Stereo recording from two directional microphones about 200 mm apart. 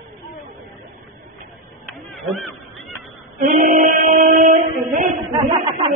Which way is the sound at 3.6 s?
40° right (ahead or behind).